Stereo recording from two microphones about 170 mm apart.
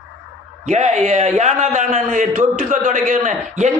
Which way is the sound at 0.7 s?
40° right (ahead or behind).